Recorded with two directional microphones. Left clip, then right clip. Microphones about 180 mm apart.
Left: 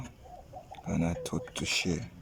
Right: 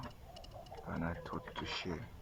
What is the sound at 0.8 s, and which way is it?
Speech, 20° left (ahead or behind).